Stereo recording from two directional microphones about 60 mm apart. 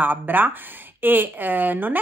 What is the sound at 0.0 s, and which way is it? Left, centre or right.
A woman's voice, right.